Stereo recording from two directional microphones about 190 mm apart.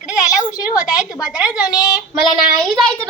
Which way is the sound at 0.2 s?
20° left (ahead or behind).